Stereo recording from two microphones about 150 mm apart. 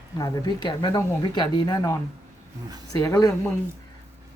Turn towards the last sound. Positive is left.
turn(degrees=20)  # may be behind; listen again after turning